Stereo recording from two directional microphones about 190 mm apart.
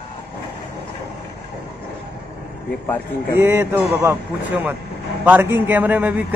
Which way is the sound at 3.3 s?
15° right (ahead or behind).